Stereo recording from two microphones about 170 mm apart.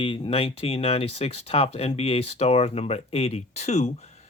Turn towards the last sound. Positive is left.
turn(degrees=40)  # may be behind; listen again after turning